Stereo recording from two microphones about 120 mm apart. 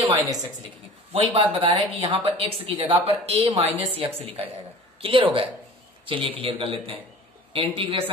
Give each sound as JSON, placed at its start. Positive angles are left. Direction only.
{"t": 0.1, "sound": "a woman's voice", "side_deg": -35}
{"t": 1.1, "sound": "speech", "side_deg": -50}